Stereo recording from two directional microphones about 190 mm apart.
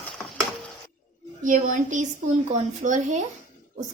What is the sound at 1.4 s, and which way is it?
A woman's voice, 40° right (ahead or behind).